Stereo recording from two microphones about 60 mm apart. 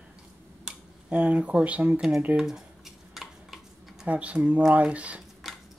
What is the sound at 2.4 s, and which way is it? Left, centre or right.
Dishes, centre.